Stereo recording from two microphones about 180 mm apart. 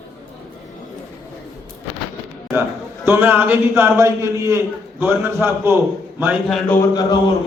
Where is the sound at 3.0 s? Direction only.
10° right (ahead or behind).